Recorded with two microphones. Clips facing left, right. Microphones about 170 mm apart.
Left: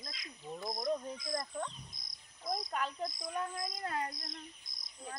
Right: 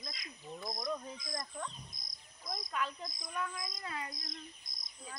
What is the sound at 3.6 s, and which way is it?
Speech, 60° left (ahead or behind).